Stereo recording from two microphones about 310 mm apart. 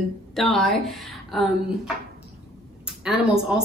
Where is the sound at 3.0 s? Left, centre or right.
Centre.